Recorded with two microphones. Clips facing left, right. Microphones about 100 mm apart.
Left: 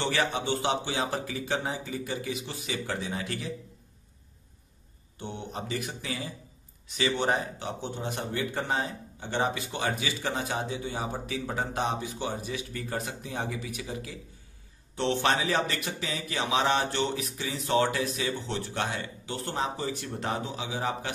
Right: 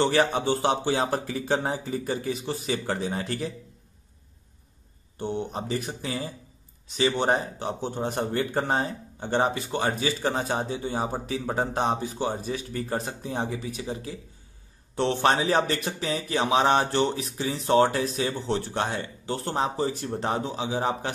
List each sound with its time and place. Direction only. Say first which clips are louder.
0.0 s speech: right 6 dB; 35° right (ahead or behind)
5.2 s speech: right 7 dB; 35° right (ahead or behind)